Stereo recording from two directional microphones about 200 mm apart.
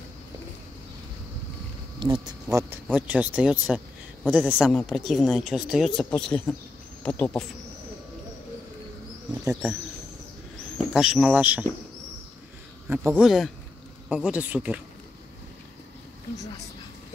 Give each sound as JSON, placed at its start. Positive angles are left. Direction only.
{"t": 2.0, "sound": "speech", "side_deg": -25}
{"t": 2.5, "sound": "speech", "side_deg": -10}
{"t": 9.3, "sound": "insect", "side_deg": -15}
{"t": 10.9, "sound": "speech", "side_deg": -5}
{"t": 12.8, "sound": "speech", "side_deg": -10}